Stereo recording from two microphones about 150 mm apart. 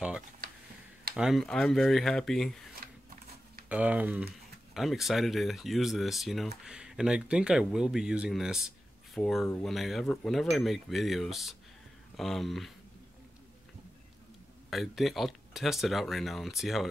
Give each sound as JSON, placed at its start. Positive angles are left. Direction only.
{"t": 1.1, "sound": "speech", "side_deg": 0}
{"t": 2.8, "sound": "a sound", "side_deg": -75}
{"t": 3.6, "sound": "speech", "side_deg": -10}
{"t": 14.7, "sound": "speech", "side_deg": 0}